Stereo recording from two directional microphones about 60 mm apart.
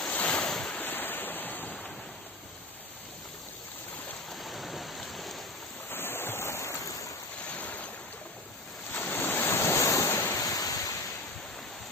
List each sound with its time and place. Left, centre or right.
0.1 s ocean: centre
0.8 s ocean: left
4.3 s rain: centre
5.9 s stream: left
7.5 s boat: left
9.0 s waves: left
10.4 s waves: left